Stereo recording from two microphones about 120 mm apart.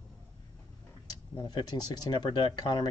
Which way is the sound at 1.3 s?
35° left (ahead or behind).